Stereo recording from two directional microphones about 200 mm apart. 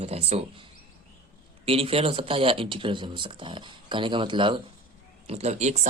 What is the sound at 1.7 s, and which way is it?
Speech, 30° right (ahead or behind).